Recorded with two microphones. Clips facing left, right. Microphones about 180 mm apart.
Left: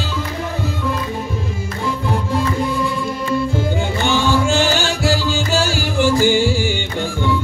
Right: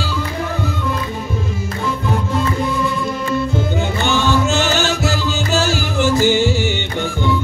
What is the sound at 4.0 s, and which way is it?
Music, 15° left (ahead or behind).